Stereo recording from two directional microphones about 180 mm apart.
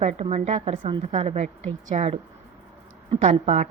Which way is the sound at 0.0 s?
35° right (ahead or behind).